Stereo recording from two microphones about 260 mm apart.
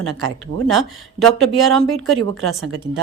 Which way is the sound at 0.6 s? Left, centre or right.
Centre.